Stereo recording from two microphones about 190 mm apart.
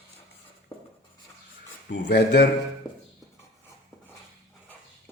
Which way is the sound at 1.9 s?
60° left (ahead or behind).